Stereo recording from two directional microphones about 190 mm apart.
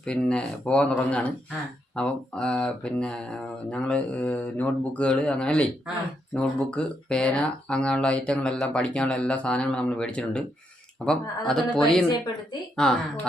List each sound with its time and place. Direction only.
0.0 s speech: 5° left (ahead or behind)